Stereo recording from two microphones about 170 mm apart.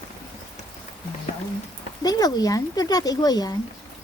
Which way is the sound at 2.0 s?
20° left (ahead or behind).